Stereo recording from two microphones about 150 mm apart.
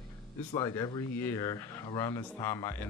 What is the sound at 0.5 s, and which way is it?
Speech, 25° left (ahead or behind).